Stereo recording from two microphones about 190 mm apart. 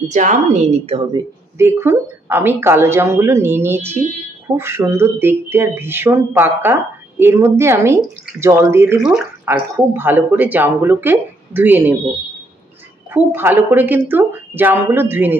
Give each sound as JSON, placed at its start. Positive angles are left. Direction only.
{"t": 0.1, "sound": "a woman's voice", "side_deg": -40}
{"t": 1.6, "sound": "speech", "side_deg": -15}
{"t": 13.1, "sound": "speech", "side_deg": -10}